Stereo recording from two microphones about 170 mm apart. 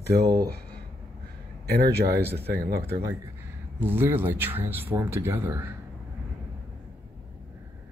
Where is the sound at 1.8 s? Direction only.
70° right (ahead or behind).